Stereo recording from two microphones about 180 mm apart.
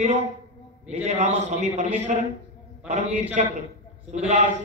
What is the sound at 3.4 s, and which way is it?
A man's voice, 40° right (ahead or behind).